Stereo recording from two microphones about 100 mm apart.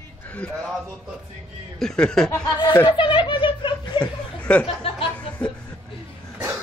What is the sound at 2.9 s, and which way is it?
Chuckle, 55° left (ahead or behind).